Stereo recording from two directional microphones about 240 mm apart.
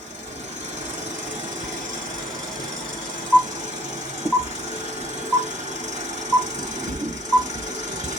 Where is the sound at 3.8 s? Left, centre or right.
Right.